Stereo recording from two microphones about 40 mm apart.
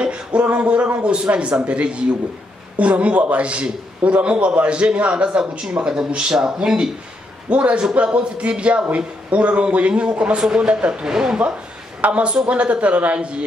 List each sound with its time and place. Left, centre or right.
0.0 s a man's voice: right
7.4 s a man's voice: right